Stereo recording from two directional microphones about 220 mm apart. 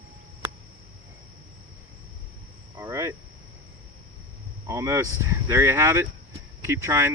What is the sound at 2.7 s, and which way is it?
Speech, 15° right (ahead or behind).